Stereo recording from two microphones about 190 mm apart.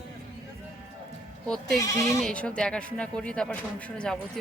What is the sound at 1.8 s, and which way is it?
Speech, 15° left (ahead or behind).